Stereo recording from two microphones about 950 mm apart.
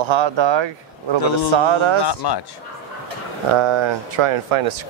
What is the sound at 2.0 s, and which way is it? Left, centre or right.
Speech, left.